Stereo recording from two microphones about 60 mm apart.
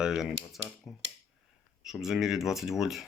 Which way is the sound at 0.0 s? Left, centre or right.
Centre.